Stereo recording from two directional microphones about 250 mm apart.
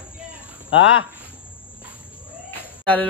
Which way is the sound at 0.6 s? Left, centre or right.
Left.